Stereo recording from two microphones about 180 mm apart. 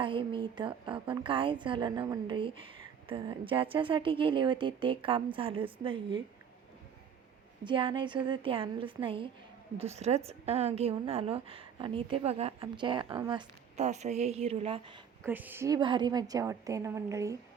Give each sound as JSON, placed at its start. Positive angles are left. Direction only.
{"t": 0.0, "sound": "a woman's voice", "side_deg": -25}
{"t": 7.6, "sound": "a woman's voice", "side_deg": -25}
{"t": 13.7, "sound": "a woman's voice", "side_deg": -40}
{"t": 15.3, "sound": "a woman's voice", "side_deg": -10}